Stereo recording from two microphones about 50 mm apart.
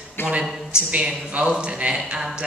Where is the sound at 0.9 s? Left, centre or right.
Right.